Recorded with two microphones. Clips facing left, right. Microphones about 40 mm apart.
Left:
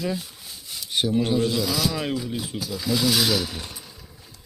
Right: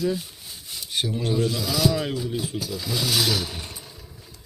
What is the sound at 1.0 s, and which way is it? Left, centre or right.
Speech, left.